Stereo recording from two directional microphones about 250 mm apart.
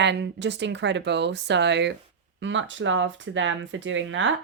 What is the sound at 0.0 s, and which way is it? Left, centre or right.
Speech, right.